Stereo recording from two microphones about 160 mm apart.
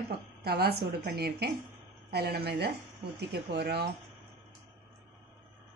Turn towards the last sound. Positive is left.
turn(degrees=-90)